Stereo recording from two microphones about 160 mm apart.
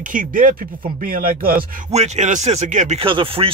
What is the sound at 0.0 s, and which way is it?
Speech, 55° right (ahead or behind).